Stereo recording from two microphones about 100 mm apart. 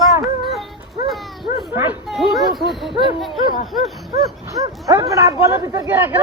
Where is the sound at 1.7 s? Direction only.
20° right (ahead or behind).